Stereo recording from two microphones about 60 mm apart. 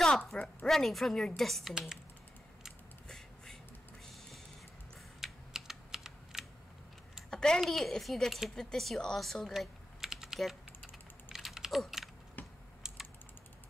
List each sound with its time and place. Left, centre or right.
0.3 s speech: centre
0.7 s a woman's voice: centre
1.7 s speech: centre
5.2 s typing: centre
7.2 s typing: centre
7.6 s a woman's voice: centre
9.6 s typing: centre
12.4 s typing: left